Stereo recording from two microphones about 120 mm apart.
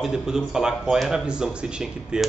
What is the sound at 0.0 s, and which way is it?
A man's voice, 5° right (ahead or behind).